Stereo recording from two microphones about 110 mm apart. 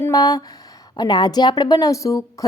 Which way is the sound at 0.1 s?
35° left (ahead or behind).